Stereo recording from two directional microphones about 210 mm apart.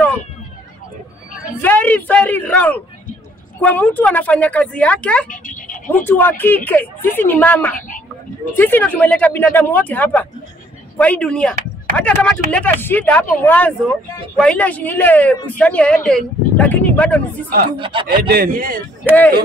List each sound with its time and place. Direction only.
1.6 s a woman's voice: 10° left (ahead or behind)
5.3 s a sound: 40° left (ahead or behind)
5.9 s a woman's voice: 10° left (ahead or behind)
17.7 s speech: 25° right (ahead or behind)
18.3 s speech: 45° right (ahead or behind)
19.1 s speech: 10° right (ahead or behind)